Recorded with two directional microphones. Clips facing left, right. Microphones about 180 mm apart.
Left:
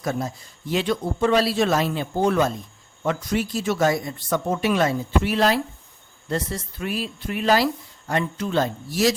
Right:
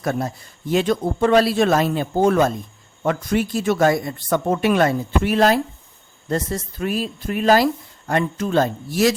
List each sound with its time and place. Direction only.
0.0 s speech: 60° right (ahead or behind)